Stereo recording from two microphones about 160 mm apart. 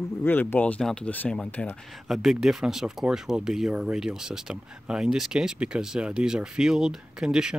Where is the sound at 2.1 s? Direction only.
Centre (ahead or behind).